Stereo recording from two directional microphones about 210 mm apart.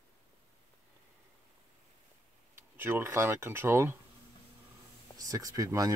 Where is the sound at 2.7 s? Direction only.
10° right (ahead or behind).